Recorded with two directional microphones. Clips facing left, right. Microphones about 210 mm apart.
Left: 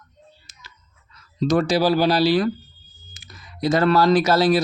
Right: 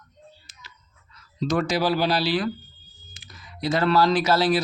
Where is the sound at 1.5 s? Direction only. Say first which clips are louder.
Left 4 dB; 35° left (ahead or behind).